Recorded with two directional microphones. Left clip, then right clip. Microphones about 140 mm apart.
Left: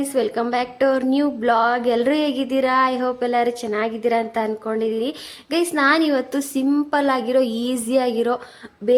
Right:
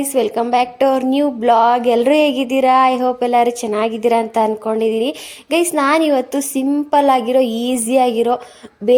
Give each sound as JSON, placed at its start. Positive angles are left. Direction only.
{"t": 0.0, "sound": "a woman's voice", "side_deg": -10}